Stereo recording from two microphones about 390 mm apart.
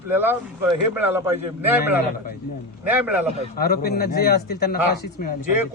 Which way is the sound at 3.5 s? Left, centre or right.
Left.